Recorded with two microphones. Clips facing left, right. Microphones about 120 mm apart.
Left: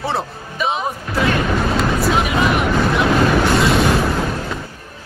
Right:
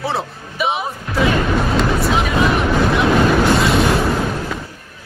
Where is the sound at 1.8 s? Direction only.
Centre (ahead or behind).